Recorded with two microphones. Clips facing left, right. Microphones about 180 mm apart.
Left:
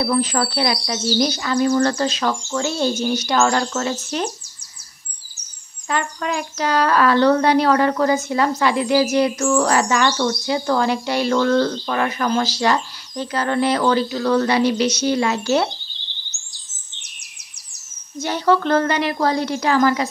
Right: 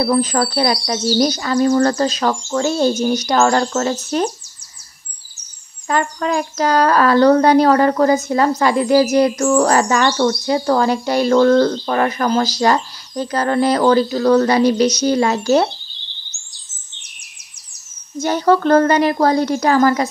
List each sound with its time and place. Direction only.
0.0 s speech: 40° right (ahead or behind)
5.9 s speech: 40° right (ahead or behind)
18.2 s a woman's voice: 45° right (ahead or behind)